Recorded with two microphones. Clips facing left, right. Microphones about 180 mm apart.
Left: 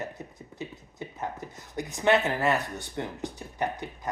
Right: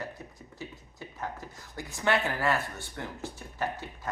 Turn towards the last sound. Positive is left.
turn(degrees=15)  # may be behind; listen again after turning